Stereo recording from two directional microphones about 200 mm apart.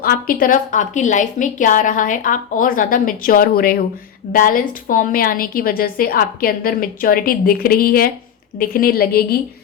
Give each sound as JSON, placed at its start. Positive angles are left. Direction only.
{"t": 0.0, "sound": "a woman's voice", "side_deg": 45}